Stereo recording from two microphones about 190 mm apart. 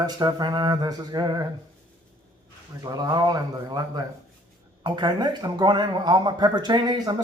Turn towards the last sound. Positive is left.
turn(degrees=-20)  # may be behind; listen again after turning